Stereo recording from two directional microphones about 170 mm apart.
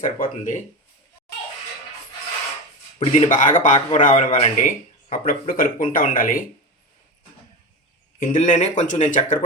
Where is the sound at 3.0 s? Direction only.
45° left (ahead or behind).